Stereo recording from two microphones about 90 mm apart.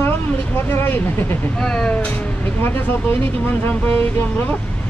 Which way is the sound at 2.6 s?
25° left (ahead or behind).